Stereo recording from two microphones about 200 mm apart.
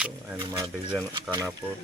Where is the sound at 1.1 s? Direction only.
20° right (ahead or behind).